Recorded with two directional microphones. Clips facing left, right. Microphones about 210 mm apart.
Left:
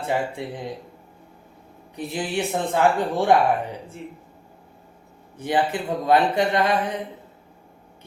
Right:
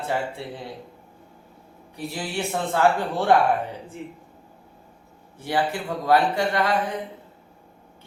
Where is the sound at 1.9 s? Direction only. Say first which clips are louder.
Left 3 dB; 20° left (ahead or behind).